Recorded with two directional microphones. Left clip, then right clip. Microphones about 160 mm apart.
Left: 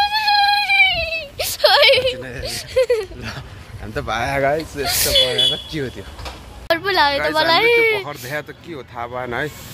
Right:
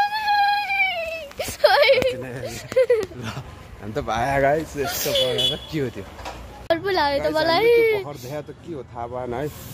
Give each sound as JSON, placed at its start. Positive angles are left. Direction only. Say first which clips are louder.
{"t": 0.0, "sound": "a sound", "louder": "left 4 dB", "side_deg": -10}
{"t": 3.9, "sound": "speech", "louder": "left 1 dB", "side_deg": -15}
{"t": 4.8, "sound": "speech", "louder": "left 8 dB", "side_deg": 5}
{"t": 6.7, "sound": "a sound", "louder": "left 4 dB", "side_deg": -20}
{"t": 7.3, "sound": "speech", "louder": "left 2 dB", "side_deg": -20}
{"t": 8.1, "sound": "speech", "louder": "left 5 dB", "side_deg": 5}